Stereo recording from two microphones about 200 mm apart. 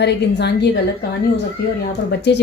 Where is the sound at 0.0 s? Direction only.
60° left (ahead or behind).